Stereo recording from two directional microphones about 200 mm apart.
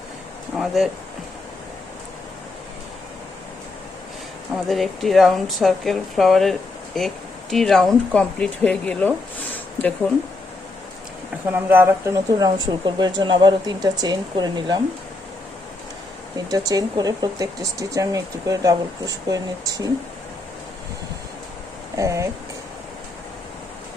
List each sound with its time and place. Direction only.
0.5 s speech: centre (ahead or behind)
4.7 s speech: centre (ahead or behind)
11.5 s speech: 10° right (ahead or behind)
16.5 s speech: 20° right (ahead or behind)
21.9 s speech: 15° right (ahead or behind)